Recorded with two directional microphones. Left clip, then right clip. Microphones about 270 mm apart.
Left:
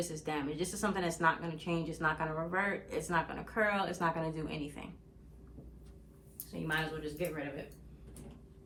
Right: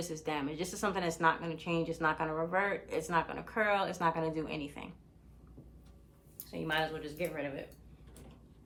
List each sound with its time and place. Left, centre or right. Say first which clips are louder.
0.0 s speech: right 1 dB; right
6.5 s speech: right 2 dB; right